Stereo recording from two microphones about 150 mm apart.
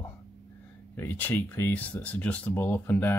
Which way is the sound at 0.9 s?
15° left (ahead or behind).